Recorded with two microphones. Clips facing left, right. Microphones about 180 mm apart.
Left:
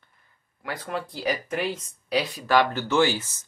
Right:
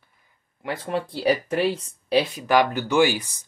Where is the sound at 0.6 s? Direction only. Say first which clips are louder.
Right 4 dB; 25° right (ahead or behind).